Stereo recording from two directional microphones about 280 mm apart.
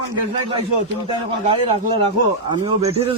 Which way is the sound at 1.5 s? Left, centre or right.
Centre.